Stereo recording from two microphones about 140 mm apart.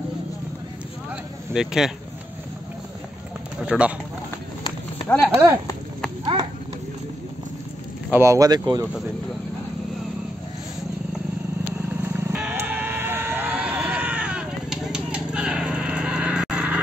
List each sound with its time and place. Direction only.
1.5 s speech: 5° right (ahead or behind)
3.6 s speech: 10° right (ahead or behind)
5.3 s speech: 20° right (ahead or behind)
8.1 s speech: 20° right (ahead or behind)
11.7 s vehicle: 15° right (ahead or behind)